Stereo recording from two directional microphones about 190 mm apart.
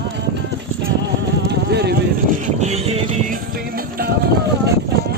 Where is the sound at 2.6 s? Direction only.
35° right (ahead or behind); by 4.1 s 50° right (ahead or behind).